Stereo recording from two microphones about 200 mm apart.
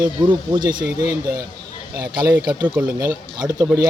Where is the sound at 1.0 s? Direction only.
50° right (ahead or behind).